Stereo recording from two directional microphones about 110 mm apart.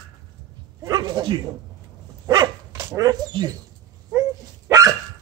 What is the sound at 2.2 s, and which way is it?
Dog, 40° right (ahead or behind).